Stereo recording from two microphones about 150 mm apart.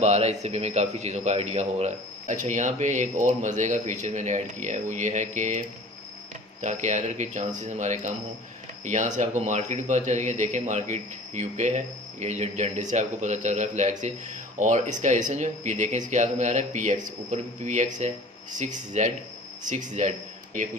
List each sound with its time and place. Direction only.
0.0 s speech: 50° right (ahead or behind)